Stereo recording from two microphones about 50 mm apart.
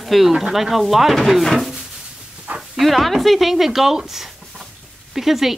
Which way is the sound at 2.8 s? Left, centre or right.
Centre.